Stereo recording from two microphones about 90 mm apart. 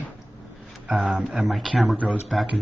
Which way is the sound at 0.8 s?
10° right (ahead or behind).